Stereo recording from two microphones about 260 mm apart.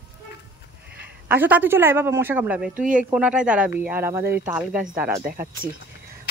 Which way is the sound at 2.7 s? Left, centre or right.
Right.